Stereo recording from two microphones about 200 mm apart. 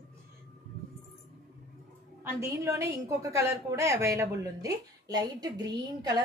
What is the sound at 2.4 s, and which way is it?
A woman's voice, 15° right (ahead or behind).